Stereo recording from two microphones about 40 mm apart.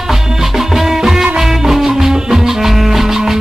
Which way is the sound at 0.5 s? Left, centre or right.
Centre.